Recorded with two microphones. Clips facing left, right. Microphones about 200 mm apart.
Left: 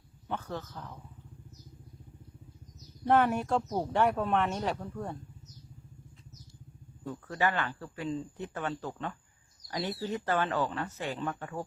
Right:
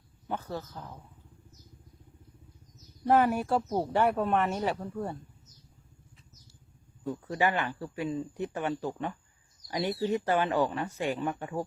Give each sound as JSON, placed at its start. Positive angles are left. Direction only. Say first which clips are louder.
{"t": 0.3, "sound": "speech", "louder": "right 1 dB", "side_deg": -10}
{"t": 3.0, "sound": "speech", "louder": "right 1 dB", "side_deg": -5}
{"t": 7.0, "sound": "speech", "louder": "right 2 dB", "side_deg": -15}